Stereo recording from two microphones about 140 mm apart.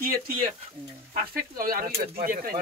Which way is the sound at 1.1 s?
90° right.